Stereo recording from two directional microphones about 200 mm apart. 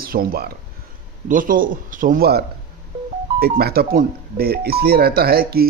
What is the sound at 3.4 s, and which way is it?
A man's voice, 50° right (ahead or behind).